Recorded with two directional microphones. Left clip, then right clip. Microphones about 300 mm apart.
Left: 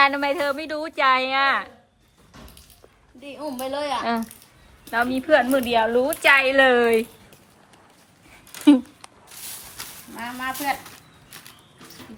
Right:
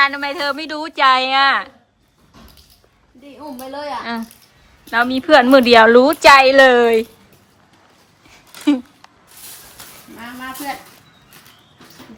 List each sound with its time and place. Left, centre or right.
0.0 s a woman's voice: centre
3.2 s a woman's voice: centre
5.6 s speech: right
6.2 s a woman's voice: centre